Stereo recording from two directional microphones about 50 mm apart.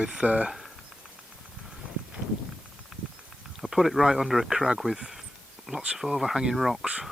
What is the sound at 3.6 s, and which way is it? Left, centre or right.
Speech, centre.